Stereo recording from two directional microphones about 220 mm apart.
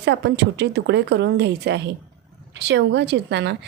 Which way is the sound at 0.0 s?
50° right (ahead or behind).